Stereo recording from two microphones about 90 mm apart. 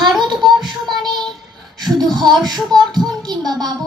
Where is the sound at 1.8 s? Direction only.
50° right (ahead or behind).